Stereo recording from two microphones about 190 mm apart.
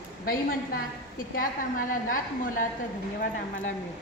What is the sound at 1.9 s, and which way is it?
Speech, 45° left (ahead or behind).